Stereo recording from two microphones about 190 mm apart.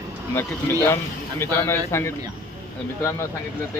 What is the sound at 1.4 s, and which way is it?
Speech, 10° left (ahead or behind).